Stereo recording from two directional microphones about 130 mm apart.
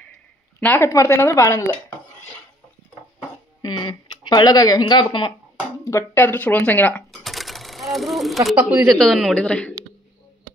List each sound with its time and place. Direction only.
0.6 s speech: 15° left (ahead or behind)
3.6 s speech: 35° left (ahead or behind)
5.9 s speech: 20° left (ahead or behind)
7.1 s sewing machine: centre (ahead or behind)
8.8 s a man's voice: centre (ahead or behind)